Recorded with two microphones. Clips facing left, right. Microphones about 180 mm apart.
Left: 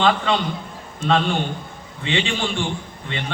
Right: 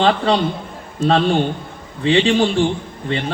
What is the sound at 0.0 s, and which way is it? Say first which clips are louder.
A man's voice: right 4 dB; 35° right (ahead or behind).